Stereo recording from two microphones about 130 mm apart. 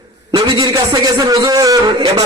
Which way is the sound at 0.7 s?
25° right (ahead or behind).